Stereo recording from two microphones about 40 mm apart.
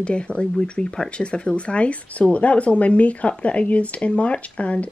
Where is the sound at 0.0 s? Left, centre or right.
Left.